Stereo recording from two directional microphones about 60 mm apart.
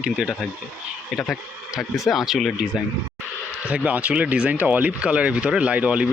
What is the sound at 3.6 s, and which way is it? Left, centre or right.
Speech, right.